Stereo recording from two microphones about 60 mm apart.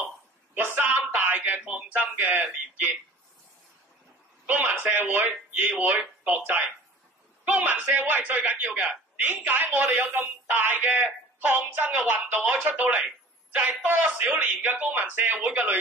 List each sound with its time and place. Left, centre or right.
0.6 s a sound: right
1.7 s a man's voice: right
4.5 s a man's voice: right
8.7 s a man's voice: centre
9.2 s a man's voice: right